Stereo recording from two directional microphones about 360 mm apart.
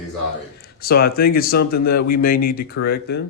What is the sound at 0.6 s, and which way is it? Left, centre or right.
Speech, left.